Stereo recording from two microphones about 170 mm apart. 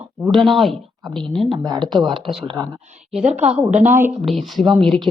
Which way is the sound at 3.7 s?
45° right (ahead or behind).